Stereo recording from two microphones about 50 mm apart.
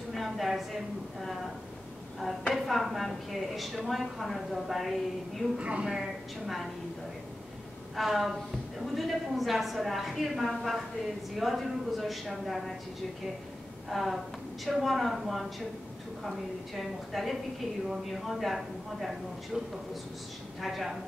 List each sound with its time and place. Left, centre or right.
0.1 s a woman's voice: centre
2.5 s a woman's voice: centre
5.6 s a woman's voice: right
6.4 s a woman's voice: centre
7.9 s a woman's voice: centre
13.8 s a woman's voice: centre